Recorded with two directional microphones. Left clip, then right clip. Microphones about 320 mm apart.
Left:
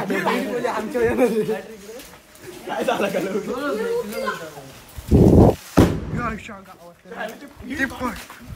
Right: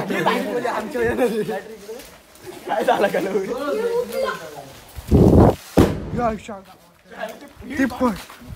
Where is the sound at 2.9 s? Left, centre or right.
Right.